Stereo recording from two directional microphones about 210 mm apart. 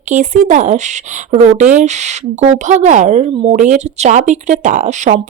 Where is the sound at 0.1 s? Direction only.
35° right (ahead or behind).